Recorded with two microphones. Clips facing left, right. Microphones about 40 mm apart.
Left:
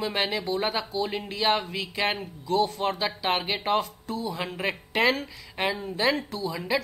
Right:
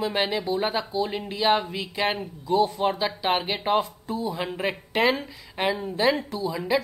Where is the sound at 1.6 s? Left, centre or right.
Centre.